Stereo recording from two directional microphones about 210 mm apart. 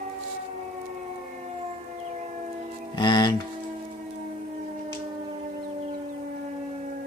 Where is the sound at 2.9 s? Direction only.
20° left (ahead or behind).